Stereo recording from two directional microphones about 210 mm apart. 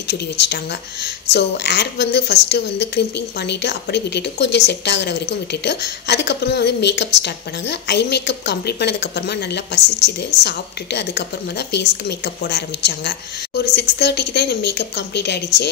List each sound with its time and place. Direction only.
0.4 s a woman's voice: 55° left (ahead or behind)